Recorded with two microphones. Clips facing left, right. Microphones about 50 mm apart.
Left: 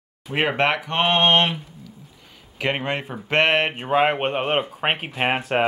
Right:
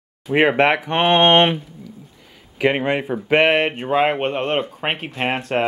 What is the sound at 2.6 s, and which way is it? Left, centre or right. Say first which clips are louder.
Speech: right 6 dB; centre.